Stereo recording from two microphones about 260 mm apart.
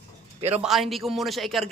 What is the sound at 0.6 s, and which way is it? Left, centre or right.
A man's voice, centre.